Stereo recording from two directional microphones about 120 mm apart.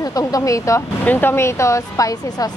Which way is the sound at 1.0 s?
15° left (ahead or behind).